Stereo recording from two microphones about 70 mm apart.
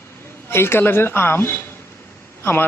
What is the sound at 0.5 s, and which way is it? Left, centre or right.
A man's voice, left.